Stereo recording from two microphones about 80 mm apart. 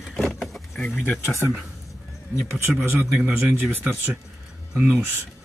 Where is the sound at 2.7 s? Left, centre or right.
Centre.